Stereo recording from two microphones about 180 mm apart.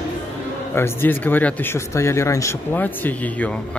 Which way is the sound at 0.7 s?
10° left (ahead or behind).